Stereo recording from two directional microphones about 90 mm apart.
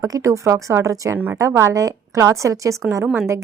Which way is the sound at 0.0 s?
35° right (ahead or behind).